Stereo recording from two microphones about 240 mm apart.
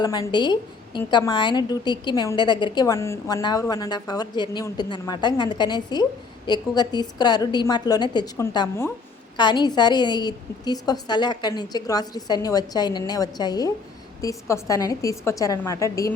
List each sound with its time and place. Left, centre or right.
0.0 s a woman's voice: centre